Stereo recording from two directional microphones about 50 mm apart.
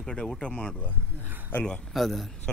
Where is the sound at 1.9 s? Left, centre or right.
Centre.